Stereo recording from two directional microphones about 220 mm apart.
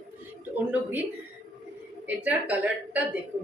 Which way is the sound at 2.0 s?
5° right (ahead or behind).